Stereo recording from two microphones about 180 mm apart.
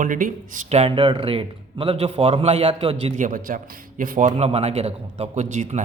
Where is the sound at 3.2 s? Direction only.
50° right (ahead or behind).